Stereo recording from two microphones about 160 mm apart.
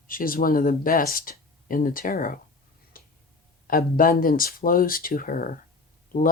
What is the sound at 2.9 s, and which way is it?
Tick-tock, 65° left (ahead or behind).